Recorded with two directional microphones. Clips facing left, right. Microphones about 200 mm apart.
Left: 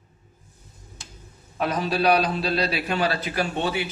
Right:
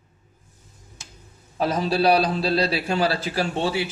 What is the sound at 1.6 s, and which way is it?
A man's voice, 30° right (ahead or behind).